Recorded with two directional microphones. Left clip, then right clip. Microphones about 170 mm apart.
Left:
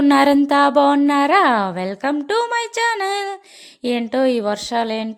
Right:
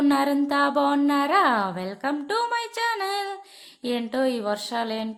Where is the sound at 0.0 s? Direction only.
50° left (ahead or behind).